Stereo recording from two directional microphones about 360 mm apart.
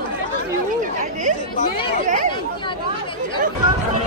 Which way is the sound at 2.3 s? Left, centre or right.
Centre.